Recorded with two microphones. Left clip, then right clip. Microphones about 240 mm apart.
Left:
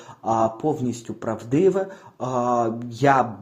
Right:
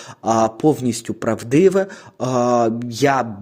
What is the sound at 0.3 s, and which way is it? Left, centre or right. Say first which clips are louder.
Speech: right 5 dB; right.